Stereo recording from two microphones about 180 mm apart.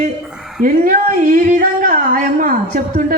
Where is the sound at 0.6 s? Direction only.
50° right (ahead or behind).